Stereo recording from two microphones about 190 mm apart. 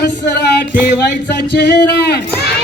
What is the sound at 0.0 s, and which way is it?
Music, 60° left (ahead or behind).